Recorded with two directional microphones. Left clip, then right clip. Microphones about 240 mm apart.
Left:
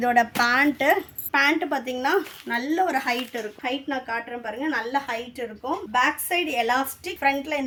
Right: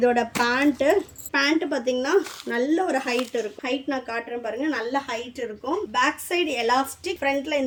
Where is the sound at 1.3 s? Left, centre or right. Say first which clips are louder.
Left 2 dB; left.